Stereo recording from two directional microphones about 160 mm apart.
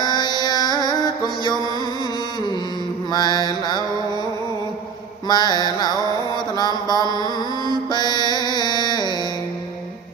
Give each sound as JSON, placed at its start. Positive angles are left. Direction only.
{"t": 0.0, "sound": "carnatic music", "side_deg": 25}
{"t": 0.4, "sound": "music", "side_deg": 25}
{"t": 3.1, "sound": "mantra", "side_deg": 25}
{"t": 5.3, "sound": "mantra", "side_deg": 25}